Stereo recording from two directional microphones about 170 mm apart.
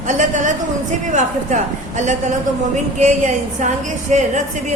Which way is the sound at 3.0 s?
45° right (ahead or behind).